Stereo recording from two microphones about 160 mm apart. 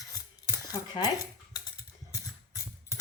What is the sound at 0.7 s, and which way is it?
Cutlery, 20° left (ahead or behind).